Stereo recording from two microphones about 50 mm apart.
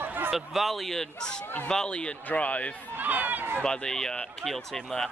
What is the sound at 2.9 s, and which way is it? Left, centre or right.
Speech, right.